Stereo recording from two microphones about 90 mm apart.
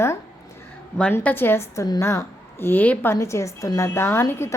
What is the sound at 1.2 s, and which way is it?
A woman's voice, 20° left (ahead or behind).